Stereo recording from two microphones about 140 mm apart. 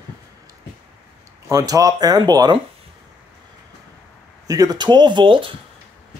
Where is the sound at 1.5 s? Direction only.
25° right (ahead or behind).